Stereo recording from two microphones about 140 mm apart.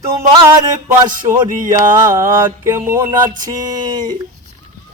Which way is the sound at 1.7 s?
20° right (ahead or behind).